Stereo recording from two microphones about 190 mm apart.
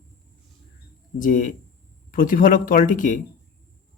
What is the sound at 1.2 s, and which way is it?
Speech, 45° left (ahead or behind).